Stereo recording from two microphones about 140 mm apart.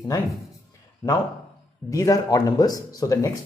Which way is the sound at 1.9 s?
25° left (ahead or behind).